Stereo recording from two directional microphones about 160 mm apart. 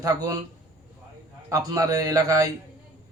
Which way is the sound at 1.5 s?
25° right (ahead or behind).